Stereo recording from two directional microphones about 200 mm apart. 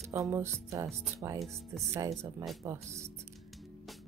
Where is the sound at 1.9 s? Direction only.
15° right (ahead or behind).